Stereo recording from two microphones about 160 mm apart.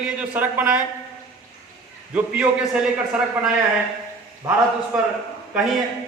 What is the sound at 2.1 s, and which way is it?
A man's voice, 10° right (ahead or behind).